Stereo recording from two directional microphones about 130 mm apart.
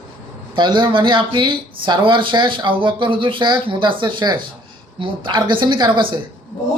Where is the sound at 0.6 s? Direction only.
35° right (ahead or behind).